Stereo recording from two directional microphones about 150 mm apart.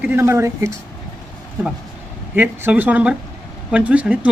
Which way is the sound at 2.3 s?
10° right (ahead or behind).